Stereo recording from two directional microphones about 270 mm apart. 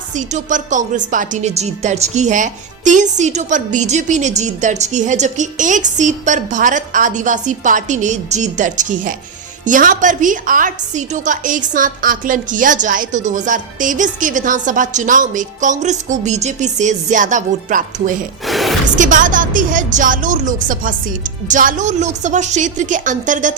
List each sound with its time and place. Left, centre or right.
0.1 s speech: right
18.4 s a sound: centre
18.9 s speech: right